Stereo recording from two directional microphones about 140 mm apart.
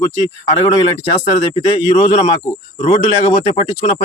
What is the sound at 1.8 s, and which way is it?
A man's voice, 55° left (ahead or behind).